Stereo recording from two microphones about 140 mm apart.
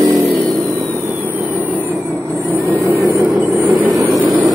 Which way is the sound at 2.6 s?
20° right (ahead or behind).